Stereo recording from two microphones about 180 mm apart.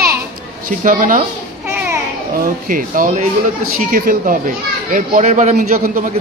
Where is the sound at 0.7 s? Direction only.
45° right (ahead or behind).